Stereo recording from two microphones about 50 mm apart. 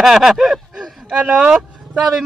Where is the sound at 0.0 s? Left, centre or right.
Centre.